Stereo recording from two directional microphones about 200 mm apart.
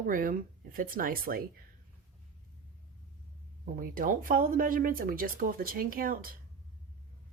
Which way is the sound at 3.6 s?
45° right (ahead or behind).